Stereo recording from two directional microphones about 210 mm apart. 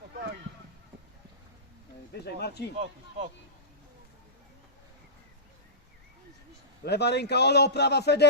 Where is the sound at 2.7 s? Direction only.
30° right (ahead or behind).